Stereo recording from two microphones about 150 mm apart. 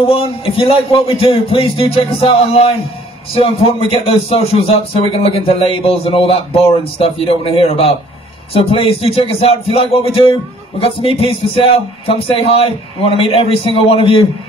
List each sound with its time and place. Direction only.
0.0 s speech: 40° left (ahead or behind)